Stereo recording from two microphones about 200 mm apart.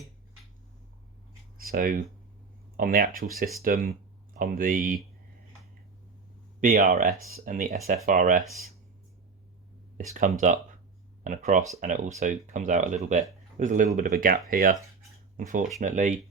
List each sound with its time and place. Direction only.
1.5 s a sound: 45° right (ahead or behind)
2.7 s speech: 45° right (ahead or behind)
6.6 s speech: 40° right (ahead or behind)
10.4 s speech: 40° right (ahead or behind)